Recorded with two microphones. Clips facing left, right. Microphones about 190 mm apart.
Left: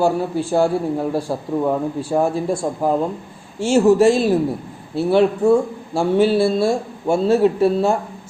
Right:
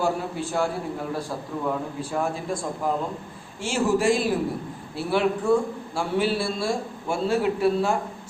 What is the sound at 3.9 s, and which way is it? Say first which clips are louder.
A man's voice: left 7 dB; 25° left (ahead or behind).